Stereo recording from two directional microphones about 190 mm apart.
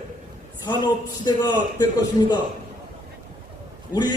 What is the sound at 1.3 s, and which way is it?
Speech, 20° left (ahead or behind).